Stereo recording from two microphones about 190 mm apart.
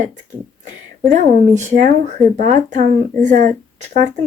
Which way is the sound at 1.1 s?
40° right (ahead or behind).